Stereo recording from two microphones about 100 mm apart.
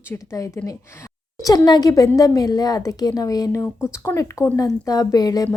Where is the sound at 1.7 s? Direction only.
40° left (ahead or behind).